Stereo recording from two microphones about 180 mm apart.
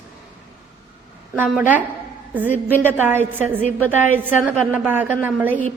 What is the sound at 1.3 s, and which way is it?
A woman's voice, 10° right (ahead or behind).